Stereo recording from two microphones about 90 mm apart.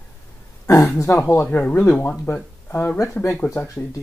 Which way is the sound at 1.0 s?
35° left (ahead or behind).